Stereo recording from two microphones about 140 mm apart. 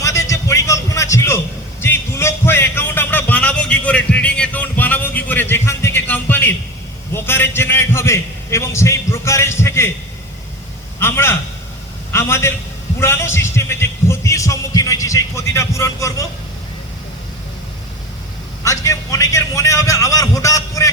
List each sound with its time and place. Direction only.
0.0 s a sound: 20° left (ahead or behind)
1.8 s music: 20° left (ahead or behind)
7.1 s speech: 15° left (ahead or behind)
11.0 s a man's voice: 15° left (ahead or behind)
18.6 s speech: 20° left (ahead or behind)